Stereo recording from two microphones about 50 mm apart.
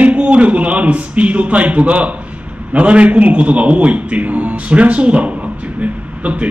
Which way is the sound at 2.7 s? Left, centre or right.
Right.